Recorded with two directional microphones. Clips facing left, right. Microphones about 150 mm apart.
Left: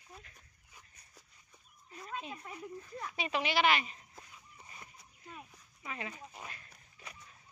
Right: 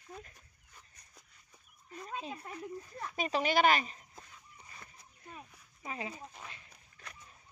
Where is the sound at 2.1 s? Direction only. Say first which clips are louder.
Right 1 dB; 35° right (ahead or behind).